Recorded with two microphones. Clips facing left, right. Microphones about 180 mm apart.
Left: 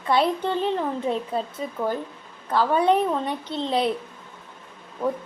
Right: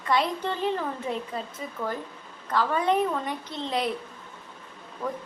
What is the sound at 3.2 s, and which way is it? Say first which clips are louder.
Speech: left 5 dB; 30° left (ahead or behind).